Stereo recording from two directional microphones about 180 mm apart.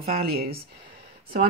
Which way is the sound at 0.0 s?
60° right (ahead or behind).